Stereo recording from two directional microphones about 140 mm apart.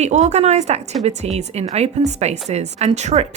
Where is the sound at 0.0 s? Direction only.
55° right (ahead or behind).